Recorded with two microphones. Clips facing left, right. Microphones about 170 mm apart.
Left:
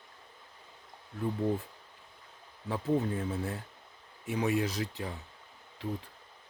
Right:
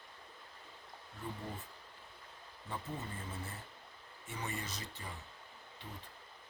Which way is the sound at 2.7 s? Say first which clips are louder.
Left 14 dB; 90° left.